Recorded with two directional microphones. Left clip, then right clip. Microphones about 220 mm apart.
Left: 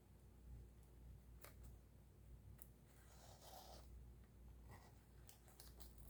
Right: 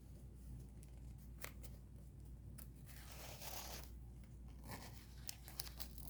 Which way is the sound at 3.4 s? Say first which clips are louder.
Right 8 dB; 45° right (ahead or behind).